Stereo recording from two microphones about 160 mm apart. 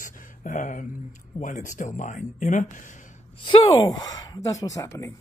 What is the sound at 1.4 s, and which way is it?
Speech, 55° left (ahead or behind).